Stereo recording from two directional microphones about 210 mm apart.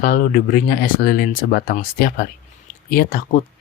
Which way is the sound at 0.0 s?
40° left (ahead or behind).